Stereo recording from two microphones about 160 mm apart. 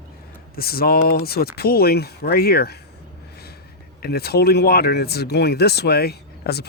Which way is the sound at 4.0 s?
80° left.